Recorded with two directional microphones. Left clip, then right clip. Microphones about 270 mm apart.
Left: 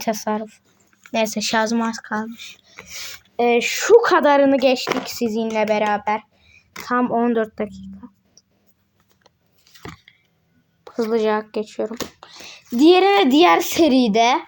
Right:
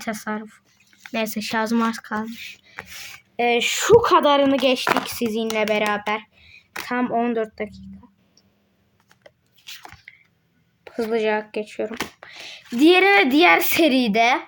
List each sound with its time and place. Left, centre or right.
0.0 s speech: centre
10.1 s a sound: centre
10.8 s speech: centre